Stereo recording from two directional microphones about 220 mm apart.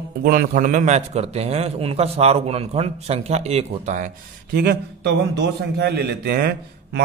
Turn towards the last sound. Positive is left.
turn(degrees=-45)  # may be behind; listen again after turning